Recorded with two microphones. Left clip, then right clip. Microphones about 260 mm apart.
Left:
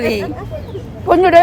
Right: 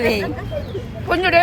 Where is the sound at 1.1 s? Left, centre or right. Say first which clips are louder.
Left 7 dB; left.